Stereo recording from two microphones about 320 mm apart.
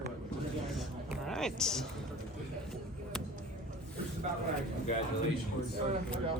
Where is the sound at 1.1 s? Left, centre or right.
Centre.